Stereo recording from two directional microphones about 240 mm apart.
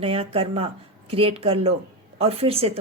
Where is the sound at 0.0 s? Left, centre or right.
Right.